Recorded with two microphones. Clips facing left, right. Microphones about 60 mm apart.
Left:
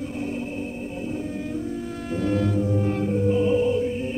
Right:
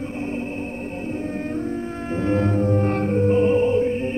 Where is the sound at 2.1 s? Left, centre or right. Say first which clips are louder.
Right 2 dB; right.